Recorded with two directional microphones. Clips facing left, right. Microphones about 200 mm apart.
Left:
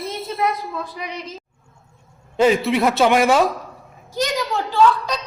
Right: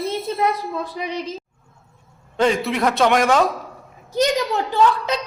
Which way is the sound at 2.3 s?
5° left (ahead or behind).